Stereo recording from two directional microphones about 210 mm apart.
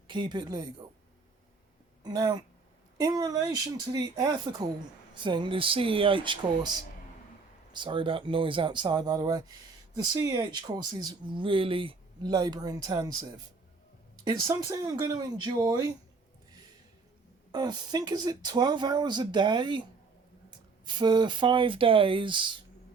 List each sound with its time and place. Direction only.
0.1 s speech: 20° right (ahead or behind)
2.0 s speech: 20° right (ahead or behind)
7.7 s speech: 20° right (ahead or behind)
14.3 s speech: 15° right (ahead or behind)
17.5 s speech: 20° right (ahead or behind)